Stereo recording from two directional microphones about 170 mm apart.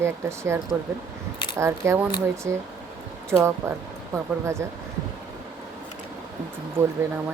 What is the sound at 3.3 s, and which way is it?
Speech, 5° right (ahead or behind).